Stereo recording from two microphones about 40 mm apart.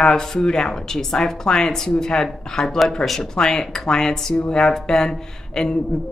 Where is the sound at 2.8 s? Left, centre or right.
Centre.